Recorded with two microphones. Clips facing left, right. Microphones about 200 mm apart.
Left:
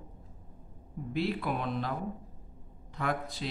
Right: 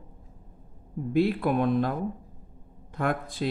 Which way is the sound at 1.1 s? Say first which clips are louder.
Right 8 dB; 50° right (ahead or behind).